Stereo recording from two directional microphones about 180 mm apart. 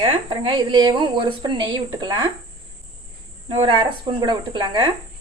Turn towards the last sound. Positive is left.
turn(degrees=-25)  # may be behind; listen again after turning